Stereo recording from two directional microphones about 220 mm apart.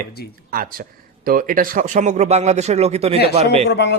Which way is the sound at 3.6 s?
50° left (ahead or behind).